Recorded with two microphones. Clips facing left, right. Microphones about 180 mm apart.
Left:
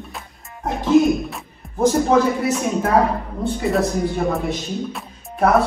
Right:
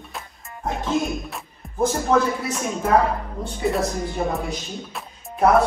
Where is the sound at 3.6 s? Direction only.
Centre (ahead or behind).